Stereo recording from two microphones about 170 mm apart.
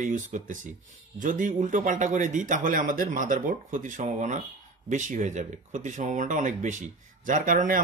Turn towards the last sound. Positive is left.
turn(degrees=-50)  # may be behind; listen again after turning